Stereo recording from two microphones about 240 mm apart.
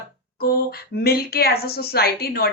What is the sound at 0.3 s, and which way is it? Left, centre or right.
Speech, left.